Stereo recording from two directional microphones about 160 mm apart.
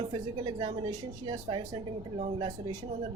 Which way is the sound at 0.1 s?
30° right (ahead or behind).